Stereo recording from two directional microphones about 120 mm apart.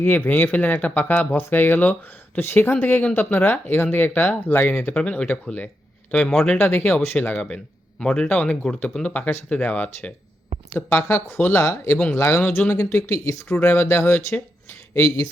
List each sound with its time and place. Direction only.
0.0 s speech: 15° left (ahead or behind)
6.6 s speech: 15° left (ahead or behind)